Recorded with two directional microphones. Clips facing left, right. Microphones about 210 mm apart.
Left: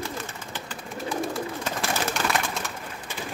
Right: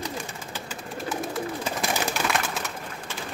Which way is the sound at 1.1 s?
5° right (ahead or behind).